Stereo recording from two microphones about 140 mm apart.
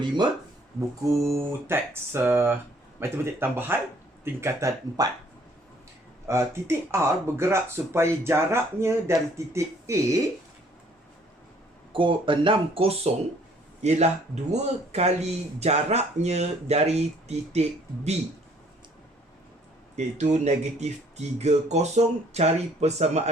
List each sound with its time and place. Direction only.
0.8 s speech: 20° right (ahead or behind)
6.2 s speech: 20° right (ahead or behind)
11.9 s speech: 35° right (ahead or behind)
20.0 s speech: 55° right (ahead or behind)